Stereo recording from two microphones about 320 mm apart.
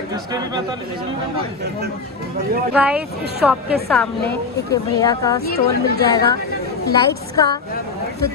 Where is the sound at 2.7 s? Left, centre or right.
Centre.